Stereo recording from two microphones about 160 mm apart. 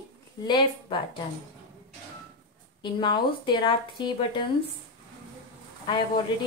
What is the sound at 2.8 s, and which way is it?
Speech, 30° left (ahead or behind).